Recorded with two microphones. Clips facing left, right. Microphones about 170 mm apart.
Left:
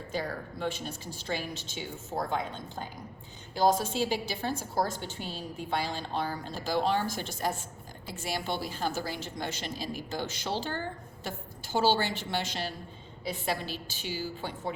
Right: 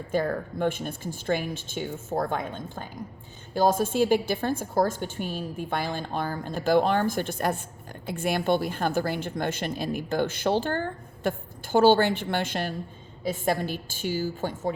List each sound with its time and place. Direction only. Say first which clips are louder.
0.1 s a woman's voice: right 8 dB; 55° right (ahead or behind)